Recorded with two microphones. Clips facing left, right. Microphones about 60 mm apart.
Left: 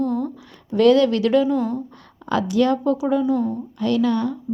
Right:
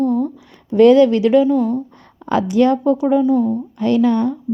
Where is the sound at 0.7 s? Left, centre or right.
Right.